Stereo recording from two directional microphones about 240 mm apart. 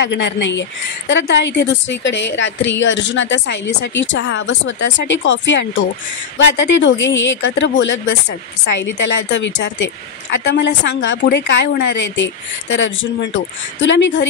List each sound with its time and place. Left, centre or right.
0.0 s a woman's voice: left